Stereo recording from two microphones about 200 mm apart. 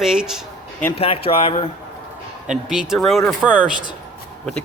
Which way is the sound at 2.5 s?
5° right (ahead or behind).